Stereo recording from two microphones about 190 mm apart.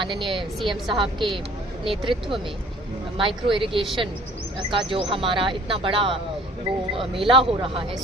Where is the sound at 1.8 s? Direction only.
25° right (ahead or behind).